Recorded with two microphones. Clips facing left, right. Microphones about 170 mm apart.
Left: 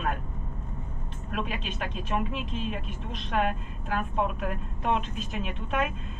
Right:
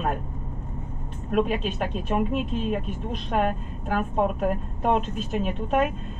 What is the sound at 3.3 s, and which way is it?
A woman's voice, 40° right (ahead or behind).